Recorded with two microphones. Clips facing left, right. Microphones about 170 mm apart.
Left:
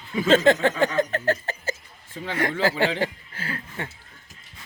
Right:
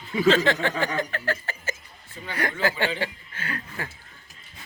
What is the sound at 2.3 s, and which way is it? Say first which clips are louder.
Speech: left 3 dB; 25° left (ahead or behind).